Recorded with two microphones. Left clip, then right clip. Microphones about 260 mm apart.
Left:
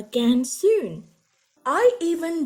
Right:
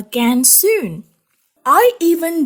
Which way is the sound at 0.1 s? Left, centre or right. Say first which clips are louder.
Right 7 dB; right.